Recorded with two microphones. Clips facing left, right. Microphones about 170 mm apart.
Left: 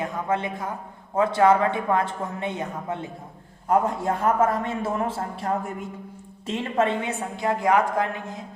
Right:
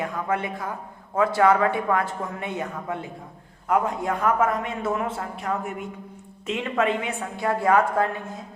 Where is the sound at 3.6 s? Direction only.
30° left (ahead or behind).